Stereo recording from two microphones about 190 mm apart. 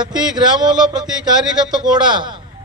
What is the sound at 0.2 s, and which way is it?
Speech, 5° right (ahead or behind).